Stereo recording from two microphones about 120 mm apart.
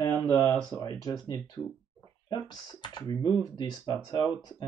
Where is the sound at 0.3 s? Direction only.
25° left (ahead or behind).